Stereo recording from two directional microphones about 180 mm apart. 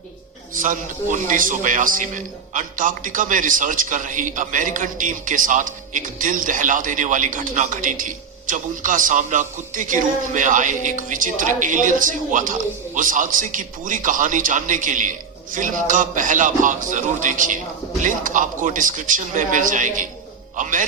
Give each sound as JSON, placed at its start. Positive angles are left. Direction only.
{"t": 0.5, "sound": "a man's voice", "side_deg": -45}
{"t": 20.6, "sound": "music", "side_deg": -45}